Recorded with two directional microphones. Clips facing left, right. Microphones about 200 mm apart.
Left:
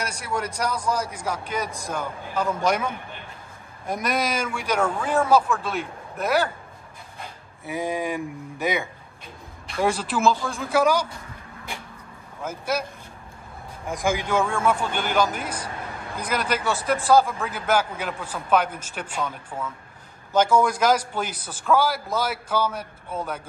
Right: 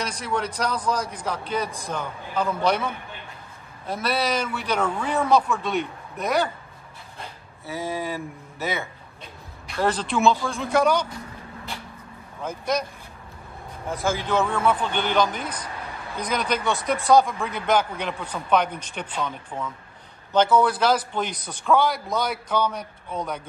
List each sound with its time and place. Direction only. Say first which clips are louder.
0.0 s a man's voice: right 1 dB; 10° left (ahead or behind)
7.6 s a man's voice: left 2 dB; 15° left (ahead or behind)
12.4 s a man's voice: right 1 dB; 5° left (ahead or behind)
13.8 s a man's voice: left 1 dB; 15° left (ahead or behind)